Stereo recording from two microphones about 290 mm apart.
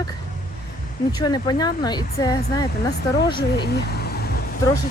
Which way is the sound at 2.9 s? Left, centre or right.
Left.